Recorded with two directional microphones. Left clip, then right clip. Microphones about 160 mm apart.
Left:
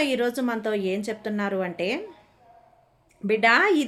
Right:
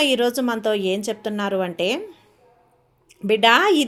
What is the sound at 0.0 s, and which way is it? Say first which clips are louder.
A woman's voice: right 5 dB; 20° right (ahead or behind).